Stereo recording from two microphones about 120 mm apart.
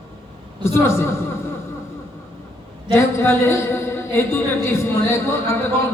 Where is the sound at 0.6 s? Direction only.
20° left (ahead or behind).